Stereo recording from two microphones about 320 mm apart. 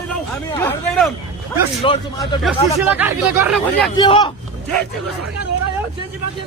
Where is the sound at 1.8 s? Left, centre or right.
Centre.